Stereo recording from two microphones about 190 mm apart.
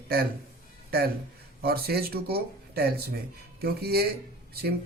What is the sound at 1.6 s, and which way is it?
Speech, 55° right (ahead or behind).